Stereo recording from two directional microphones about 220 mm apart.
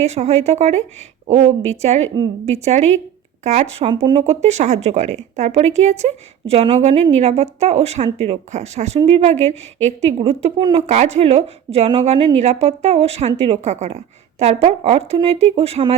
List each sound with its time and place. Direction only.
0.0 s speech: 30° right (ahead or behind)
4.2 s speech: 30° right (ahead or behind)